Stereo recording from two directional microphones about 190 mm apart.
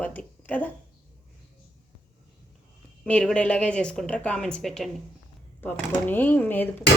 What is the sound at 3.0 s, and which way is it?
A woman's voice, 5° left (ahead or behind).